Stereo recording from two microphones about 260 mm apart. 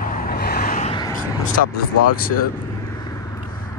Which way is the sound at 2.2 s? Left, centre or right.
Left.